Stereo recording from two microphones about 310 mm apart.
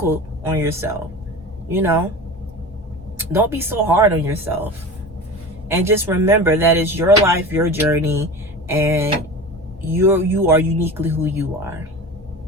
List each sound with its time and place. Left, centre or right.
0.0 s speech: centre
3.2 s speech: centre